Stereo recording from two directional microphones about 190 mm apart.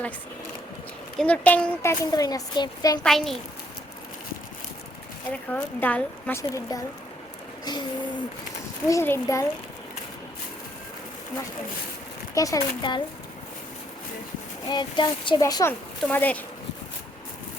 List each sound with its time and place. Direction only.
1.2 s a woman's voice: 5° left (ahead or behind)
3.0 s a child's voice: centre (ahead or behind)
5.3 s a woman's voice: 5° left (ahead or behind)
7.6 s a sound: 20° left (ahead or behind)
8.9 s a woman's voice: 15° left (ahead or behind)
12.3 s a woman's voice: 15° left (ahead or behind)
14.7 s a woman's voice: 25° left (ahead or behind); by 16.4 s 10° left (ahead or behind)